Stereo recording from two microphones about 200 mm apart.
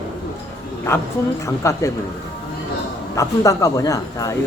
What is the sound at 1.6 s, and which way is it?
Speech, 15° left (ahead or behind).